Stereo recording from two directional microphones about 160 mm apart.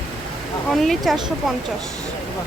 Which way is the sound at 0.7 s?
Centre (ahead or behind).